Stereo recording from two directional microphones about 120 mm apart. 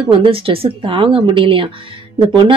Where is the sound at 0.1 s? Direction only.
50° right (ahead or behind).